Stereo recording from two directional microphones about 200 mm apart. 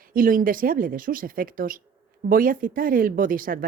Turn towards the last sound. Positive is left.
turn(degrees=-45)  # may be behind; listen again after turning